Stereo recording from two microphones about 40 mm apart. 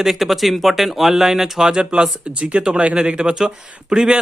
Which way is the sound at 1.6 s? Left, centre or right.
Right.